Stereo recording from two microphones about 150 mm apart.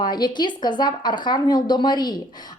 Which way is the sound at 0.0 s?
30° left (ahead or behind).